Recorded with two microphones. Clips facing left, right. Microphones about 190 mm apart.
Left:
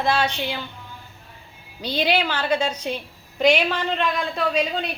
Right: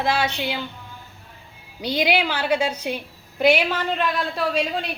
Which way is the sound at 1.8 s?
10° right (ahead or behind).